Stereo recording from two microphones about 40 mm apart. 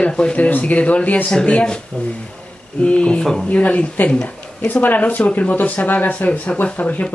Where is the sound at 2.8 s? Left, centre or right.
Left.